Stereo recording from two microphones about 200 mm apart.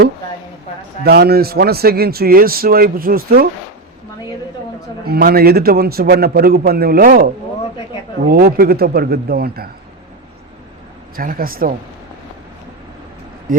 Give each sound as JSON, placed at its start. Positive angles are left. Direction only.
{"t": 1.0, "sound": "a man's voice", "side_deg": -50}
{"t": 5.0, "sound": "a man's voice", "side_deg": -50}
{"t": 8.3, "sound": "a man's voice", "side_deg": -50}
{"t": 11.2, "sound": "a man's voice", "side_deg": -45}
{"t": 13.5, "sound": "speech", "side_deg": -45}